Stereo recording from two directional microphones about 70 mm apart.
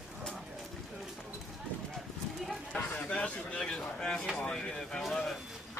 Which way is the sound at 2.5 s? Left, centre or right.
Centre.